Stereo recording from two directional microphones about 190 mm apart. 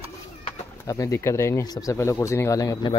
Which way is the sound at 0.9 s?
15° left (ahead or behind).